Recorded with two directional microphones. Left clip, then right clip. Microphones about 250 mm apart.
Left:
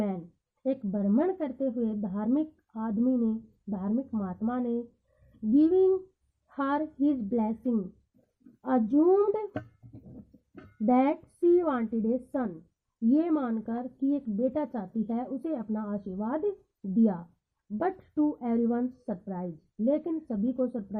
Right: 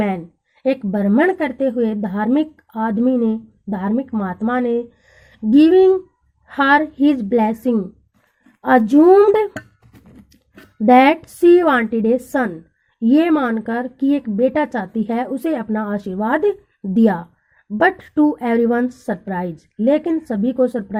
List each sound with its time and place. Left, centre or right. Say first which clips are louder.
0.8 s a woman's voice: right 11 dB; right
9.2 s a woman's voice: right 15 dB; right
10.8 s a woman's voice: right 15 dB; right